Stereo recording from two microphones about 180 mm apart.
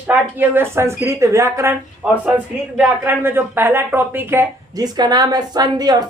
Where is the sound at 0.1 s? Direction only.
10° right (ahead or behind).